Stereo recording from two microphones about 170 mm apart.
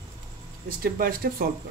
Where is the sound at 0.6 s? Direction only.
60° right (ahead or behind).